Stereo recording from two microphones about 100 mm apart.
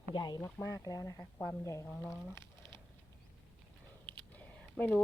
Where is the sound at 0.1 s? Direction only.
50° left (ahead or behind).